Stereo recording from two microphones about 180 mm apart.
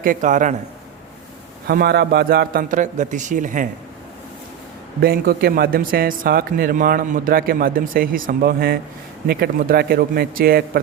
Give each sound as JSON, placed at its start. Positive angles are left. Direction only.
{"t": 0.0, "sound": "speech", "side_deg": -45}
{"t": 1.6, "sound": "speech", "side_deg": -60}
{"t": 4.9, "sound": "speech", "side_deg": -55}